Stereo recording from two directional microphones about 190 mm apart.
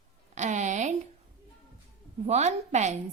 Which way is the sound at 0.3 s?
40° right (ahead or behind).